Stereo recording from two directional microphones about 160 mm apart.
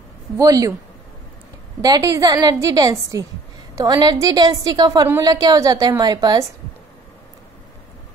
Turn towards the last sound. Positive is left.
turn(degrees=-25)  # may be behind; listen again after turning